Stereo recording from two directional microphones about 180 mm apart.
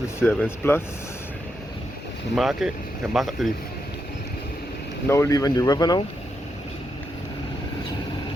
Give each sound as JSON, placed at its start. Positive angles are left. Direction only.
{"t": 0.2, "sound": "speech", "side_deg": 10}
{"t": 2.3, "sound": "speech", "side_deg": 0}
{"t": 5.0, "sound": "speech", "side_deg": 15}